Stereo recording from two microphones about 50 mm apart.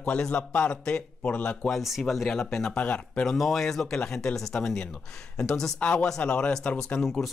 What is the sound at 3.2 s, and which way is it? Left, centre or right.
Speech, centre.